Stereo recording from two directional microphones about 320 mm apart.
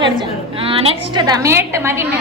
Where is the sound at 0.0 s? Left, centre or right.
Centre.